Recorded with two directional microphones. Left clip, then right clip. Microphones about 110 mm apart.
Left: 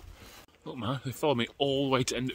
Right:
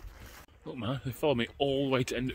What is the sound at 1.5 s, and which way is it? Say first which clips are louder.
Speech: left 1 dB; 10° left (ahead or behind).